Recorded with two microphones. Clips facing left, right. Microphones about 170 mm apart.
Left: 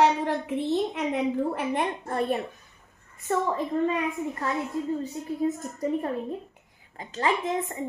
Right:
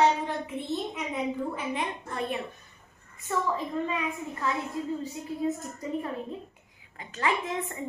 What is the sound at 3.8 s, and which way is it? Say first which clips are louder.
Speech: left 5 dB; 45° left (ahead or behind).